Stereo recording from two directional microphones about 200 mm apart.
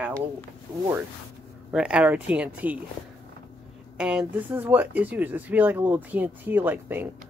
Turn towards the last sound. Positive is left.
turn(degrees=-10)  # may be behind; listen again after turning